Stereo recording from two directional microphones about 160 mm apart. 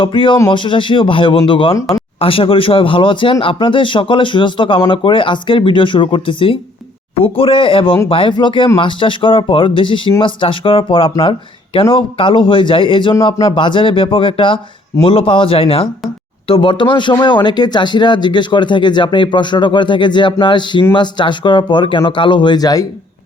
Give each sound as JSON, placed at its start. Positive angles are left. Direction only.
{"t": 0.0, "sound": "speech", "side_deg": 30}